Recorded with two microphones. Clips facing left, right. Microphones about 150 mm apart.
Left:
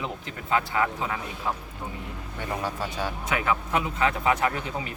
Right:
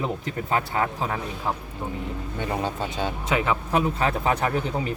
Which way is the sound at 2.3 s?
25° right (ahead or behind).